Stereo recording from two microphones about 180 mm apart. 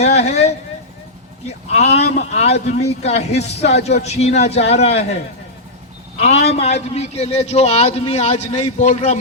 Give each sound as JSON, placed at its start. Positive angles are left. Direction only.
{"t": 0.0, "sound": "a sound", "side_deg": 40}
{"t": 1.5, "sound": "a man's voice", "side_deg": 35}
{"t": 6.1, "sound": "a man's voice", "side_deg": 35}